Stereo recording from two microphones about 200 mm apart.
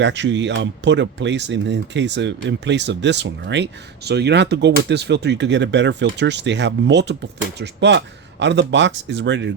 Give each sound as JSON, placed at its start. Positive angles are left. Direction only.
{"t": 0.0, "sound": "speech", "side_deg": -65}